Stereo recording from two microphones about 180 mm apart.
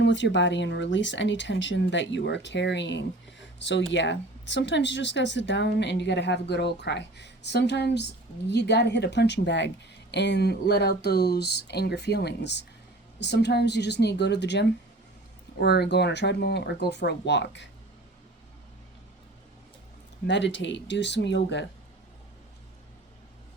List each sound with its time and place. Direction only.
0.0 s speech: 85° left
20.2 s speech: 80° left